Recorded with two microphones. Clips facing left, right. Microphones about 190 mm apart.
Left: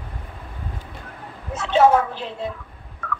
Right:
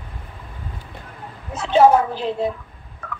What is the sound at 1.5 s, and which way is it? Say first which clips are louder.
Speech: right 2 dB; 35° right (ahead or behind).